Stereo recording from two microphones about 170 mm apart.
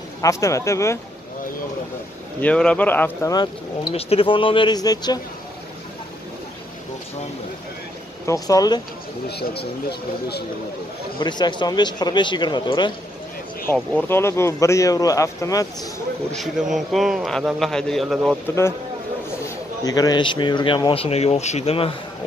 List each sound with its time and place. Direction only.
0.2 s speech: 20° left (ahead or behind)
2.4 s speech: 5° left (ahead or behind)
3.9 s speech: 35° left (ahead or behind)
8.3 s speech: 20° left (ahead or behind)
9.3 s speech: 70° left (ahead or behind)
11.1 s speech: 25° left (ahead or behind)
13.7 s speech: 10° left (ahead or behind)
16.3 s a man's voice: centre (ahead or behind)
19.8 s speech: 20° left (ahead or behind)